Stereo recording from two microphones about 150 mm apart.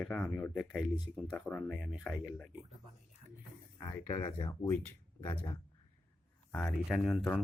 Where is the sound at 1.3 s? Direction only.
10° left (ahead or behind).